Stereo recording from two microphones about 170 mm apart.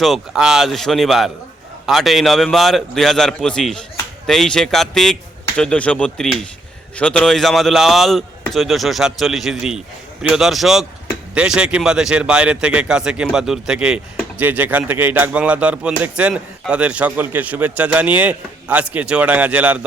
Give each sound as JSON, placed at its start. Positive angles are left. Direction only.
{"t": 0.0, "sound": "a man's voice", "side_deg": 0}